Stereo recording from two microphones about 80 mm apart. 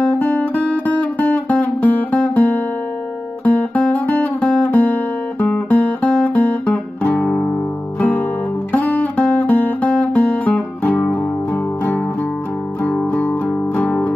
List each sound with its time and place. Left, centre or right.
0.1 s music: left
6.1 s guitar: centre
7.2 s guitar: centre
8.0 s guitar: centre
8.7 s music: centre
11.0 s music: centre
12.8 s music: centre